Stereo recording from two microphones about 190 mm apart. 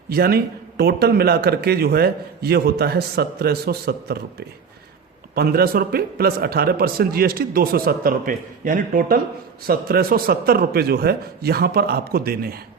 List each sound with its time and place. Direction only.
0.1 s a man's voice: 55° right (ahead or behind)